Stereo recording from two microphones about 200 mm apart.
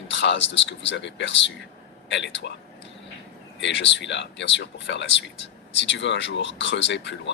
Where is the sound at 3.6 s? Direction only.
65° left (ahead or behind).